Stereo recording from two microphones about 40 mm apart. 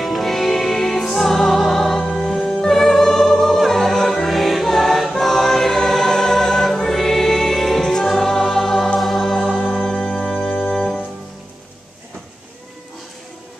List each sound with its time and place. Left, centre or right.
0.0 s music: centre
5.2 s choir: centre
7.9 s music: centre
9.6 s music: centre